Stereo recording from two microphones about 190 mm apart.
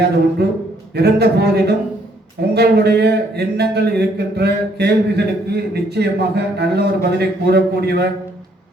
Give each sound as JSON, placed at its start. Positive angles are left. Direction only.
{"t": 0.4, "sound": "speech", "side_deg": -60}